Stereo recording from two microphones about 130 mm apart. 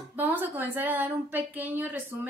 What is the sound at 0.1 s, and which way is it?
A woman's voice, 15° right (ahead or behind).